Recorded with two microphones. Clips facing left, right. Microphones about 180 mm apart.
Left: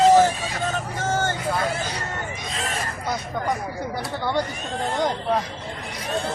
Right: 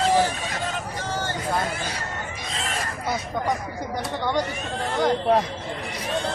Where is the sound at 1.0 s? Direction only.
50° left (ahead or behind).